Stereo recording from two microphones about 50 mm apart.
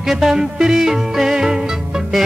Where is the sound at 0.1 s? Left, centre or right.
Centre.